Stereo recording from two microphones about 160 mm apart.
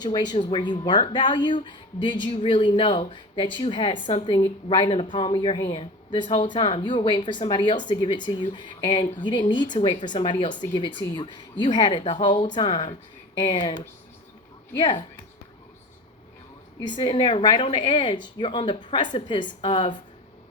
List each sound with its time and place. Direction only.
0.0 s speech: 25° left (ahead or behind)
16.8 s speech: 30° left (ahead or behind)